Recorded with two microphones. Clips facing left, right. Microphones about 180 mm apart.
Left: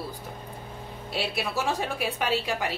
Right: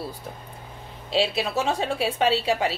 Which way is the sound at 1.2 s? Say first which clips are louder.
Right 4 dB; 25° right (ahead or behind).